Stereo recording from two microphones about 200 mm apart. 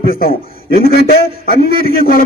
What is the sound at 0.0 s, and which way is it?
A man's voice, 50° left (ahead or behind).